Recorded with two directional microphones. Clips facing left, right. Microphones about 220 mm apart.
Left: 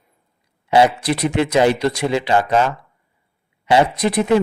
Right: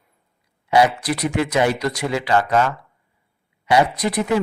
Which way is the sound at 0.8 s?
25° left (ahead or behind).